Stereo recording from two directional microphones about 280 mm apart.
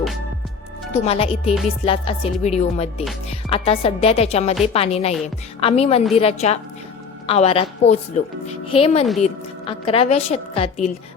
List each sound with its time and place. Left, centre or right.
1.0 s a woman's voice: left